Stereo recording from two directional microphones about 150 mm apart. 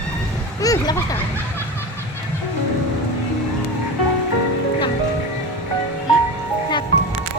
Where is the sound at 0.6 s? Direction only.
25° left (ahead or behind).